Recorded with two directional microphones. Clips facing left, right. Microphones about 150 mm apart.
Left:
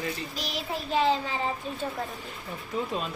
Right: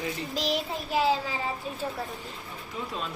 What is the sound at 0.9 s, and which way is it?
Speech, 5° right (ahead or behind).